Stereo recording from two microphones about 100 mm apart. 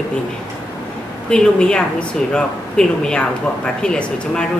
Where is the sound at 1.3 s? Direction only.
10° left (ahead or behind).